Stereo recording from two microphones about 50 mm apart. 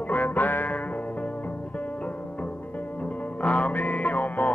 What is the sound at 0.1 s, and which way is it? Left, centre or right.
Music, left.